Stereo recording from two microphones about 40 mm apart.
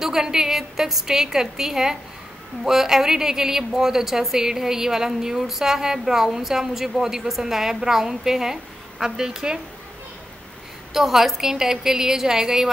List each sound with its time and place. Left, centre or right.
0.0 s speech: centre
10.9 s speech: centre